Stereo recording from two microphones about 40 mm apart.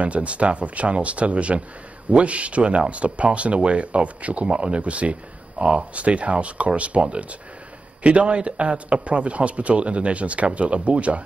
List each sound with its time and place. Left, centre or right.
0.0 s a man's voice: right